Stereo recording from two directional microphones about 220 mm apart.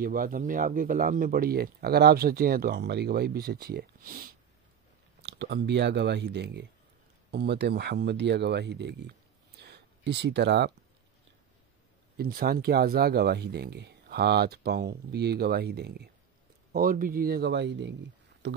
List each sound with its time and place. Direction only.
0.0 s speech: 40° right (ahead or behind)
9.6 s a sound: 50° right (ahead or behind)
12.2 s speech: 45° right (ahead or behind)